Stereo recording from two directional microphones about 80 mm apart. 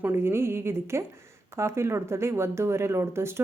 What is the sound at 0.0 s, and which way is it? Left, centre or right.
Speech, right.